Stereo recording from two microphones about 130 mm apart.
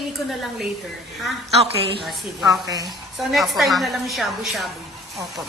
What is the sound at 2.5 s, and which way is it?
Speech, 30° right (ahead or behind).